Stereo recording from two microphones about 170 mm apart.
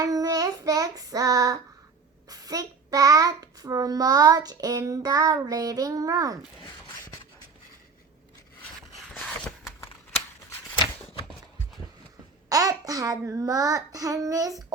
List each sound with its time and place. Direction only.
0.0 s child singing: 20° right (ahead or behind)
2.3 s a child's voice: 20° right (ahead or behind)
9.1 s a sound: 10° left (ahead or behind)
12.5 s a child's voice: 20° right (ahead or behind)